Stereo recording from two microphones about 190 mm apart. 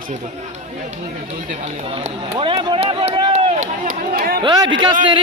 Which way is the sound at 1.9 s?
30° right (ahead or behind).